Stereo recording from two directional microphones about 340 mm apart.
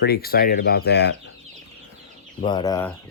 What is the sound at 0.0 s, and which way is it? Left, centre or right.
Speech, left.